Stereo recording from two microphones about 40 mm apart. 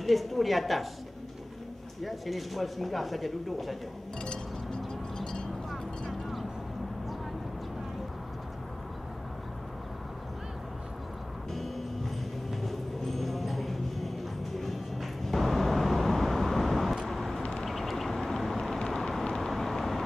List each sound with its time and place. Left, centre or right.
0.0 s speech: centre
2.0 s speech: centre
4.2 s music: centre
5.7 s vehicle: centre
11.5 s music: centre
17.1 s vehicle: centre